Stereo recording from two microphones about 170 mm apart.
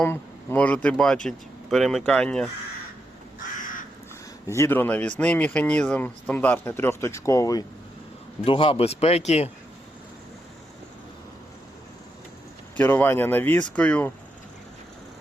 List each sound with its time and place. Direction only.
0.0 s speech: 10° left (ahead or behind)
4.4 s speech: 15° left (ahead or behind)
8.4 s speech: 30° left (ahead or behind)
12.7 s speech: 10° left (ahead or behind)